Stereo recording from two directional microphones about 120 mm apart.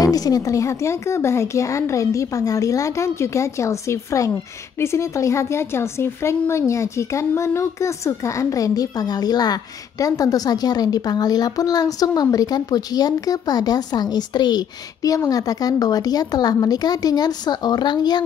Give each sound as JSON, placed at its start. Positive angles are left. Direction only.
{"t": 0.0, "sound": "speech", "side_deg": 30}